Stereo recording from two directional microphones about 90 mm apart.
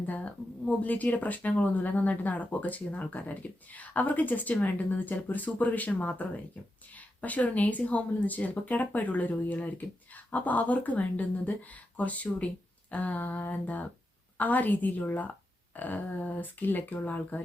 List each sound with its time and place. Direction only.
0.0 s speech: 15° left (ahead or behind)